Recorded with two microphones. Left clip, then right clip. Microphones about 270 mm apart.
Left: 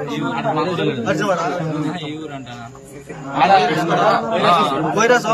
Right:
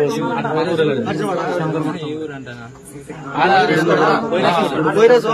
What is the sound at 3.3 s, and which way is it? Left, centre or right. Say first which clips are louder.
A man's voice: even; centre.